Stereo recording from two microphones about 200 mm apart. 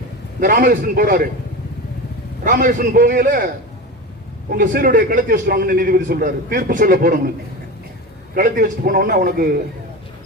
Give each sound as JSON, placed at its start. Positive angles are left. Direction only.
{"t": 0.3, "sound": "a man's voice", "side_deg": -45}
{"t": 2.4, "sound": "a man's voice", "side_deg": -40}
{"t": 8.4, "sound": "a man's voice", "side_deg": -45}